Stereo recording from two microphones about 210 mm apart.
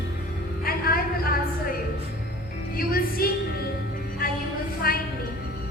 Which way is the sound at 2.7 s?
45° left (ahead or behind).